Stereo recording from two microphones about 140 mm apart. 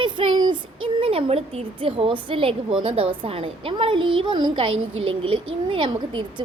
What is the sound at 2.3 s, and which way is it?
A woman's voice, 40° right (ahead or behind).